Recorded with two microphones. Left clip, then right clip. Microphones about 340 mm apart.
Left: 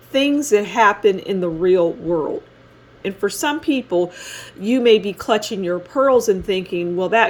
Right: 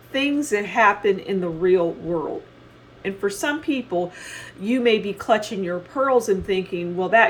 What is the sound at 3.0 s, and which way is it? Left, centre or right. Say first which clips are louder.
Speech: left 3 dB; left.